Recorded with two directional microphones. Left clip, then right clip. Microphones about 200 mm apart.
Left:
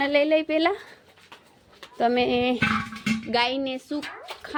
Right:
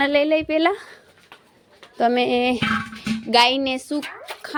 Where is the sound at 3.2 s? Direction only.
15° right (ahead or behind).